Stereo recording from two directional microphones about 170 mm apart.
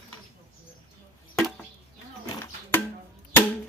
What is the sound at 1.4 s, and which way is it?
Chop, 5° left (ahead or behind).